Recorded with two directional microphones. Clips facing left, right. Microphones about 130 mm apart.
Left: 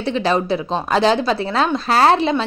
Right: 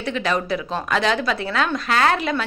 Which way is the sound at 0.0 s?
30° left (ahead or behind).